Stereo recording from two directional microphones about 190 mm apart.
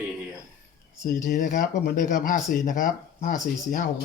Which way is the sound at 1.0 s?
45° left (ahead or behind).